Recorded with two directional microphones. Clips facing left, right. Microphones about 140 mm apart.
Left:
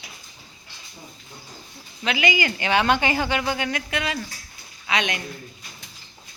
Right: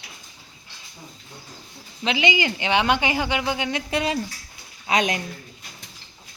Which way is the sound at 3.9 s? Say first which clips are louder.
Right 4 dB; 35° right (ahead or behind).